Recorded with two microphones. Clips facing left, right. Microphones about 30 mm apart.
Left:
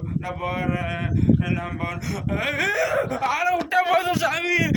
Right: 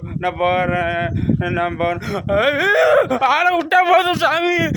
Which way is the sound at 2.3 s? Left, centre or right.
Right.